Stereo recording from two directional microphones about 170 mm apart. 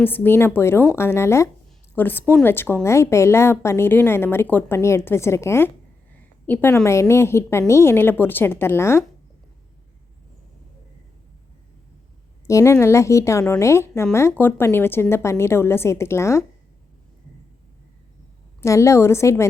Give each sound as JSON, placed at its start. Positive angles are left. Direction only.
{"t": 0.0, "sound": "a woman's voice", "side_deg": 10}
{"t": 12.5, "sound": "a woman's voice", "side_deg": 15}
{"t": 18.6, "sound": "a woman's voice", "side_deg": 15}